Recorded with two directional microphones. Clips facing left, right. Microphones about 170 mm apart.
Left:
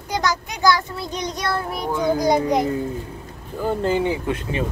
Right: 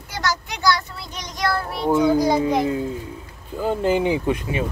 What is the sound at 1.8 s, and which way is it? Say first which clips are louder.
Speech: right 8 dB; 20° right (ahead or behind).